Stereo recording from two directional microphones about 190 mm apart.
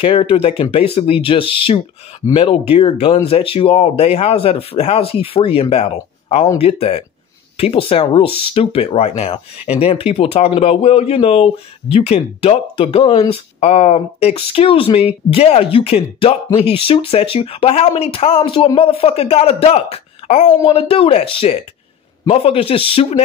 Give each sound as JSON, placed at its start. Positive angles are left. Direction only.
{"t": 0.0, "sound": "speech", "side_deg": 30}